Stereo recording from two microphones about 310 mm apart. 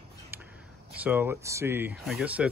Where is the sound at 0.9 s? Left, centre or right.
Centre.